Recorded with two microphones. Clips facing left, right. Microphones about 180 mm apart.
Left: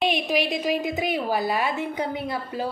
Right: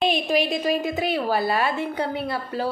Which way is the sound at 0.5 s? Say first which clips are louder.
Right 1 dB; 15° left (ahead or behind).